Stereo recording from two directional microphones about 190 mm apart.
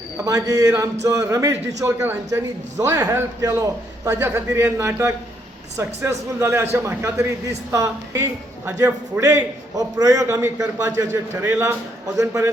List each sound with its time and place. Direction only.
0.3 s speech: 20° right (ahead or behind)